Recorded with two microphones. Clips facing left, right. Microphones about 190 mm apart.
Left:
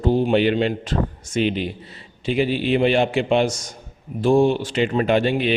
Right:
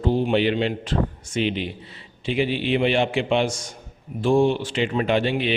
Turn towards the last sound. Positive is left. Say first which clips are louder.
# left 3 dB
turn(degrees=45)  # may be behind; listen again after turning